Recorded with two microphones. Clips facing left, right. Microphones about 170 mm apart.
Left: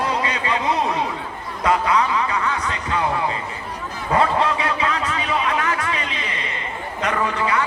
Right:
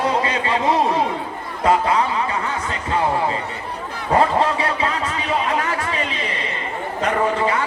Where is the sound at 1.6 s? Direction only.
30° right (ahead or behind).